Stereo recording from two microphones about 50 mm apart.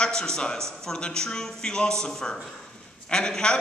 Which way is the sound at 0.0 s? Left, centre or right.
Centre.